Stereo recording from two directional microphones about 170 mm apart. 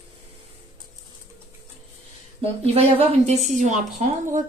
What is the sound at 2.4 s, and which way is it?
A woman's voice, 35° right (ahead or behind).